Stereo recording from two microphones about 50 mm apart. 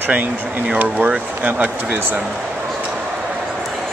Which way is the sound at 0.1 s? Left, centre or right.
Right.